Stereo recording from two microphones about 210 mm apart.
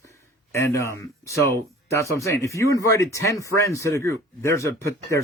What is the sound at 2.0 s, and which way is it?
Speech, 15° left (ahead or behind).